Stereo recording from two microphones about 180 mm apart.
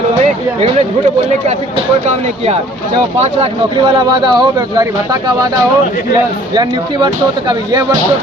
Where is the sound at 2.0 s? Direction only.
35° right (ahead or behind).